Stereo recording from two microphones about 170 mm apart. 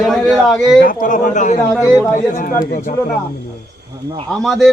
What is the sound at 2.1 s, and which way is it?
Speech, 50° left (ahead or behind).